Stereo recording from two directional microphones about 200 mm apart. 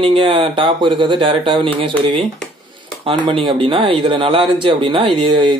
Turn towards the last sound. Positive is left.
turn(degrees=-25)  # may be behind; listen again after turning